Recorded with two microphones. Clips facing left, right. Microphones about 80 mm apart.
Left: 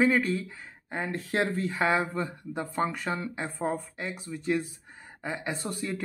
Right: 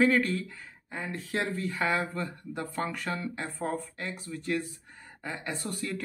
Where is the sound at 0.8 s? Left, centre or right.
Left.